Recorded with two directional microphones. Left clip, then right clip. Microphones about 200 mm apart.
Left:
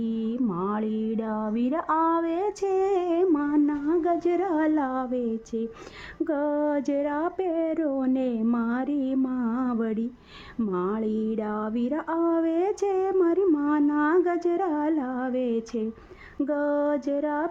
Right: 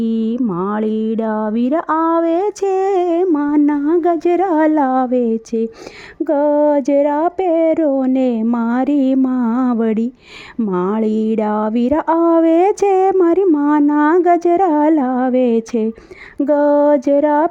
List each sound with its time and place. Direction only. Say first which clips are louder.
0.0 s speech: right 10 dB; 40° right (ahead or behind)